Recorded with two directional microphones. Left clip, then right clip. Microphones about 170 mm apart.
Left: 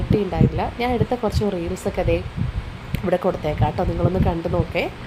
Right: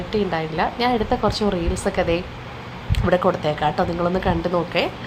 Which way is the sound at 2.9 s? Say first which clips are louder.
Right 2 dB; 10° left (ahead or behind).